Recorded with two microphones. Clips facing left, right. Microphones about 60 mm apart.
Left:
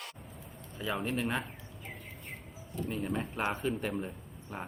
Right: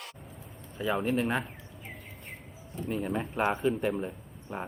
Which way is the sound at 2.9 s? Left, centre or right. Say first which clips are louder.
Right 4 dB; centre.